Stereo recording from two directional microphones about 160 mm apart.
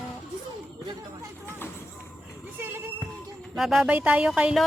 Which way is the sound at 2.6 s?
15° right (ahead or behind).